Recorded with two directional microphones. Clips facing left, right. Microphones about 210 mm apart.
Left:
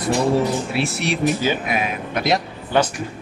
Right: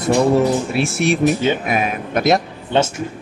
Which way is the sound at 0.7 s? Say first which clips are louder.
Right 5 dB; 50° right (ahead or behind).